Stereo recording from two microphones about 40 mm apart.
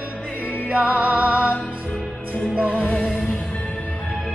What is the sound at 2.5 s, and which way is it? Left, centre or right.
Music, right.